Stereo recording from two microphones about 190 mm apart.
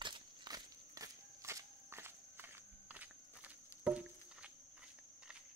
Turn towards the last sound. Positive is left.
turn(degrees=-5)  # may be behind; listen again after turning